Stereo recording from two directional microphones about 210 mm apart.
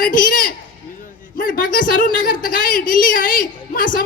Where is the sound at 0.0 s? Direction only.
40° left (ahead or behind).